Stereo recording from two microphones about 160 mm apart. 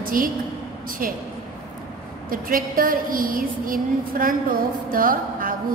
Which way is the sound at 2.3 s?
65° right (ahead or behind).